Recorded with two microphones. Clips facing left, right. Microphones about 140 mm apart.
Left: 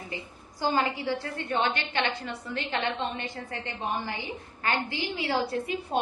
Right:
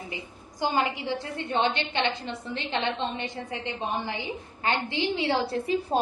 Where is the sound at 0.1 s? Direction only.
20° right (ahead or behind).